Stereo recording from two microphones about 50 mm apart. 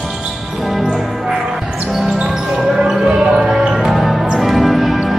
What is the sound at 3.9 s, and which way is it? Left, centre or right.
Music, centre.